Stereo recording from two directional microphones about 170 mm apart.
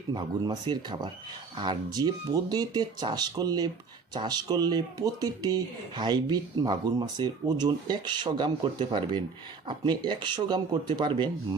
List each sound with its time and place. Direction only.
0.1 s speech: 25° right (ahead or behind)